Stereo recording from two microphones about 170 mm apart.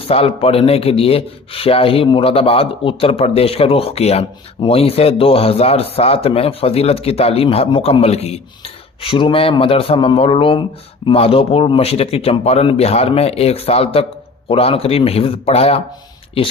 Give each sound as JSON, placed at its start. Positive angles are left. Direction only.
{"t": 0.0, "sound": "speech", "side_deg": 35}